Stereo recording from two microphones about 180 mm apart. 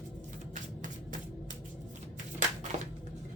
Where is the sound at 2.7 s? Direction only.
40° right (ahead or behind).